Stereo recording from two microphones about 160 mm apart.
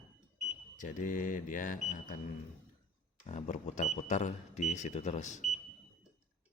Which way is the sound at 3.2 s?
45° left (ahead or behind).